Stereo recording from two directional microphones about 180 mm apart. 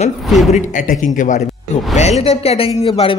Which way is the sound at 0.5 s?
45° left (ahead or behind).